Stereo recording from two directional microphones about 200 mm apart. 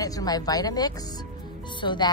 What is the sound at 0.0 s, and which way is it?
Speech, 20° left (ahead or behind).